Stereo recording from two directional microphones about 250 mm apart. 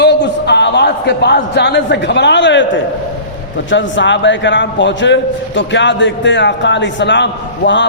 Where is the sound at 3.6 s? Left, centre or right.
Left.